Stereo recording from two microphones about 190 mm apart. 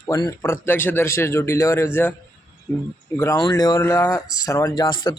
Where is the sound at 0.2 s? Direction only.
15° left (ahead or behind).